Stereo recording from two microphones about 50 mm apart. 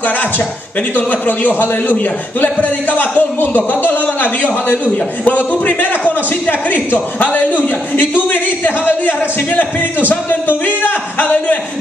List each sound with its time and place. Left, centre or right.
0.9 s a man's voice: left
7.9 s a man's voice: left